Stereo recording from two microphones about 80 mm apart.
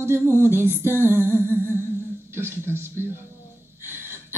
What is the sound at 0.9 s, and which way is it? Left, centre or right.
A woman's voice, right.